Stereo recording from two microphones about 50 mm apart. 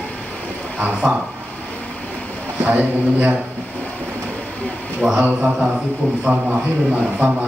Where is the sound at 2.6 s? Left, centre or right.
Right.